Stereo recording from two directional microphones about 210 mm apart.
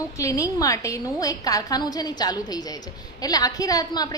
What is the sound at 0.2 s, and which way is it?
A woman's voice, 15° left (ahead or behind).